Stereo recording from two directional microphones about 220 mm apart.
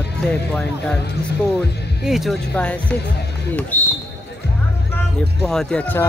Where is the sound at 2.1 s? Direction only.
Centre (ahead or behind).